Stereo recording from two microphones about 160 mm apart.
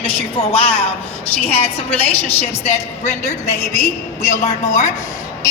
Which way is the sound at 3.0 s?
45° left (ahead or behind).